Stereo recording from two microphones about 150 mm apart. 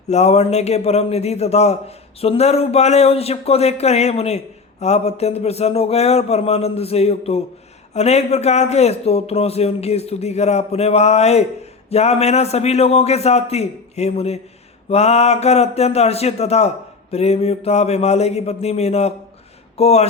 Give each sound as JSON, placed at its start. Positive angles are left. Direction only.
{"t": 0.1, "sound": "speech", "side_deg": 45}